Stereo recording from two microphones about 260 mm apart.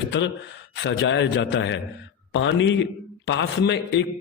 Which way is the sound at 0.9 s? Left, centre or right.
Left.